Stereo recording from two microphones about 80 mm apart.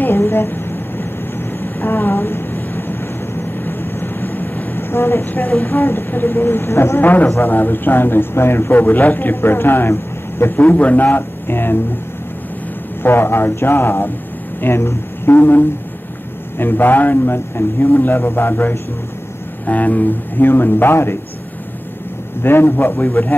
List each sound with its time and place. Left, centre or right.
0.0 s a sound: left
1.6 s vehicle: left
3.6 s a man's voice: left
13.0 s a man's voice: left
22.4 s a man's voice: left